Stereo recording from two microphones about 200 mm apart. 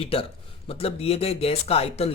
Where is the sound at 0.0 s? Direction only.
30° left (ahead or behind).